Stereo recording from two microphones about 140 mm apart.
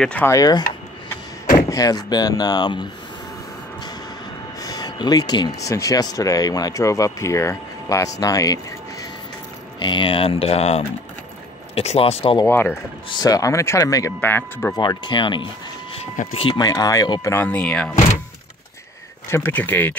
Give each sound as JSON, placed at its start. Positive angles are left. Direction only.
{"t": 0.0, "sound": "speech", "side_deg": 10}
{"t": 0.3, "sound": "speech", "side_deg": 25}
{"t": 4.6, "sound": "speech", "side_deg": 25}
{"t": 9.8, "sound": "speech", "side_deg": 35}
{"t": 12.4, "sound": "speech", "side_deg": 15}
{"t": 14.8, "sound": "speech", "side_deg": 35}
{"t": 19.2, "sound": "speech", "side_deg": 20}